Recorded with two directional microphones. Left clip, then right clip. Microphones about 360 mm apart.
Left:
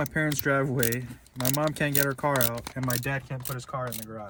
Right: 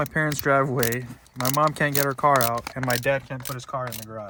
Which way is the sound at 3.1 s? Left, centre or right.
Right.